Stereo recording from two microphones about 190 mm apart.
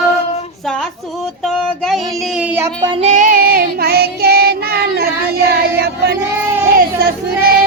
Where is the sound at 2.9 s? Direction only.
35° right (ahead or behind); by 5.5 s 55° right (ahead or behind).